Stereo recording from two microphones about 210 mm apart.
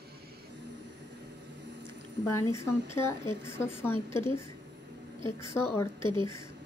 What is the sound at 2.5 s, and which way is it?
A woman's voice, 10° left (ahead or behind).